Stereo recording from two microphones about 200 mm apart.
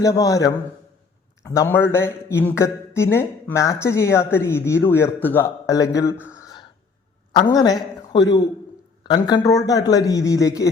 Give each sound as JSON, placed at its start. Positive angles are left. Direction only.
{"t": 0.0, "sound": "a man's voice", "side_deg": 15}